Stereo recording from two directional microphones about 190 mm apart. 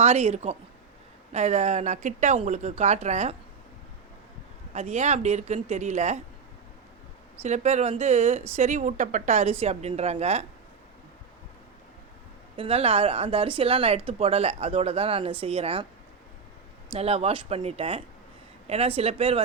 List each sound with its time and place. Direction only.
0.0 s speech: 35° right (ahead or behind)
4.7 s speech: 35° right (ahead or behind)
7.4 s speech: 35° right (ahead or behind)
12.5 s speech: 30° right (ahead or behind)
16.9 s speech: 30° right (ahead or behind)